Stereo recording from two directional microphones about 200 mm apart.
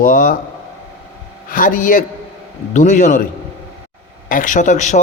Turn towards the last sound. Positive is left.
turn(degrees=35)  # may be behind; listen again after turning